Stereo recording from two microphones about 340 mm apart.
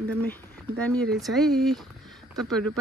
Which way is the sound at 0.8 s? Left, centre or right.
Centre.